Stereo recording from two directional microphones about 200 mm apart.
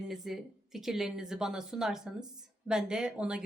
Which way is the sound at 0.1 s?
Centre (ahead or behind).